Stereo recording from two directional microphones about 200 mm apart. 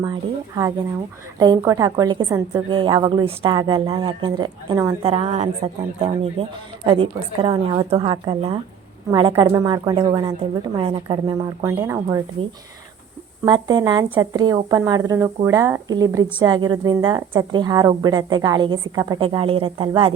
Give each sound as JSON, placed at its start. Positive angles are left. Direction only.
{"t": 0.0, "sound": "speech", "side_deg": -20}
{"t": 5.0, "sound": "speech", "side_deg": -30}
{"t": 13.4, "sound": "speech", "side_deg": -20}